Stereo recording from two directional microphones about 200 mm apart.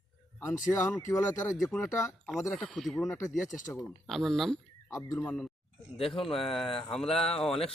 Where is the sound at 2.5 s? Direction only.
5° left (ahead or behind).